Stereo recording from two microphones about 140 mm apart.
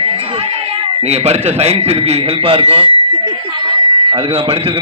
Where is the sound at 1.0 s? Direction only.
50° right (ahead or behind).